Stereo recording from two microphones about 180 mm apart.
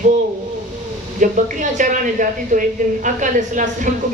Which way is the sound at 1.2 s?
45° right (ahead or behind).